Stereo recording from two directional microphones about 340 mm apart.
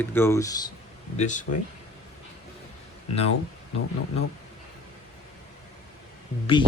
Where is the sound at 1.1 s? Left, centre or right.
Left.